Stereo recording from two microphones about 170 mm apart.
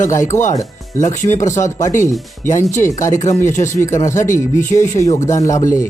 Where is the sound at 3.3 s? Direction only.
15° left (ahead or behind).